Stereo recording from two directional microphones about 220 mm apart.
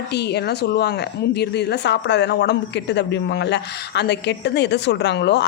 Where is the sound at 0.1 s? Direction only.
50° left (ahead or behind).